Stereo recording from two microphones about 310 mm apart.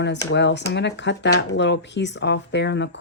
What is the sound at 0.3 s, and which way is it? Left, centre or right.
Speech, left.